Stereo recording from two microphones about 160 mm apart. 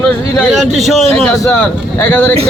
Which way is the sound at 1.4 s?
10° left (ahead or behind).